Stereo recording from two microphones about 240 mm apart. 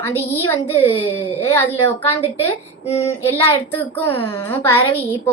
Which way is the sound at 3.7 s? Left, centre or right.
Centre.